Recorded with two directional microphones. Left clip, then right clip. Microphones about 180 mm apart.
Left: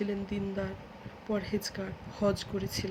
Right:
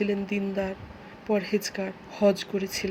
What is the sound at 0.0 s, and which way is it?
Speech, 15° right (ahead or behind).